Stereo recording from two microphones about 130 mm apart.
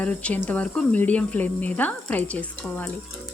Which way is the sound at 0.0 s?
10° left (ahead or behind).